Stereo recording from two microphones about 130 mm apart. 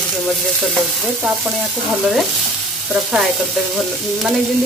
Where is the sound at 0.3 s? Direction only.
Centre (ahead or behind).